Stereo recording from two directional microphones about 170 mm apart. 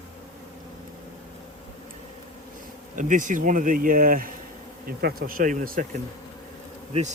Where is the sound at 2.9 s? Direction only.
50° right (ahead or behind).